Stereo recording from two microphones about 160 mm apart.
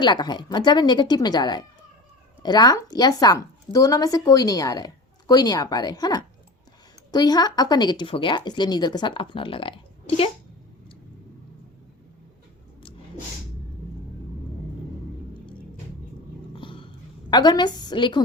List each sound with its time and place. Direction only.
0.0 s speech: 25° left (ahead or behind)
16.6 s dog: 30° left (ahead or behind)
17.3 s speech: 25° left (ahead or behind)